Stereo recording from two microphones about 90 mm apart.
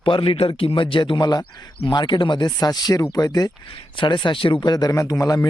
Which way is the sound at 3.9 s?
60° left (ahead or behind).